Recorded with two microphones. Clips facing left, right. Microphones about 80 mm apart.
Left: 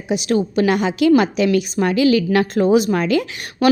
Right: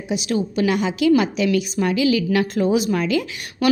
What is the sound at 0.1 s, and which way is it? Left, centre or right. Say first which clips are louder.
A woman's voice: left 4 dB; left.